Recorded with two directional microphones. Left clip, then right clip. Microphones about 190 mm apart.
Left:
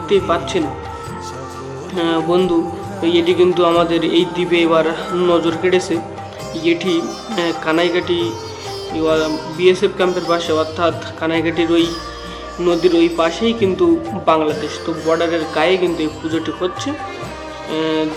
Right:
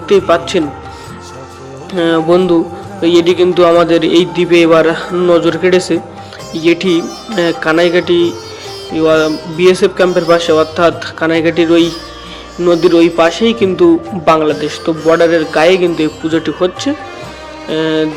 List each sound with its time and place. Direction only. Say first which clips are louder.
0.1 s a man's voice: right 6 dB; 30° right (ahead or behind)
2.0 s a man's voice: right 6 dB; 25° right (ahead or behind)